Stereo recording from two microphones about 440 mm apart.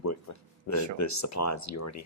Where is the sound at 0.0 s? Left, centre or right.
Left.